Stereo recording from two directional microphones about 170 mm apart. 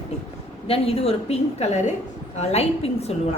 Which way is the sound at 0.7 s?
35° left (ahead or behind).